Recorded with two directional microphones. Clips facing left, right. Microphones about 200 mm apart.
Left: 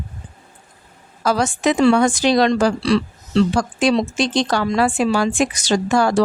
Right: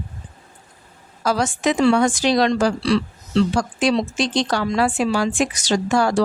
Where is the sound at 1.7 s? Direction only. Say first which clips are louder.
Left 2 dB; 55° left (ahead or behind).